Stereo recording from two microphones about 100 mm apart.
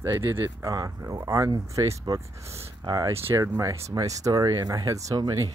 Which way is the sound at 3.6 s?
30° right (ahead or behind).